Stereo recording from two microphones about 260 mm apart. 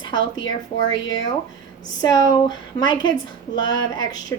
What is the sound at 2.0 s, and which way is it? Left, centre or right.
Speech, centre.